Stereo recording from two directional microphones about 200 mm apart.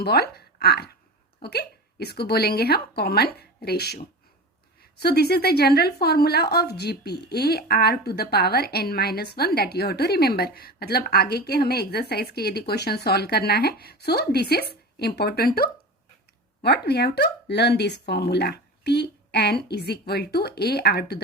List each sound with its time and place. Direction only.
0.0 s a woman's voice: 50° left (ahead or behind)